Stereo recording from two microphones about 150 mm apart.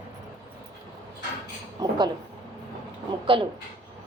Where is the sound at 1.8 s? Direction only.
30° right (ahead or behind).